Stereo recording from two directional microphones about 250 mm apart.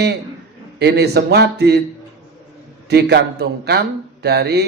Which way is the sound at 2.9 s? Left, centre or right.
Right.